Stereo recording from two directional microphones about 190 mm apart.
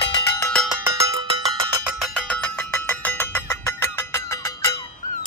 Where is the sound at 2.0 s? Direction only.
5° left (ahead or behind).